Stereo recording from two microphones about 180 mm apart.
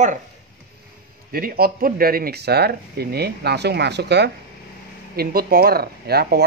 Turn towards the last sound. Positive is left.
turn(degrees=-60)  # may be behind; listen again after turning